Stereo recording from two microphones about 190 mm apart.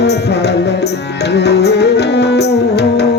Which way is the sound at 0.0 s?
60° left (ahead or behind).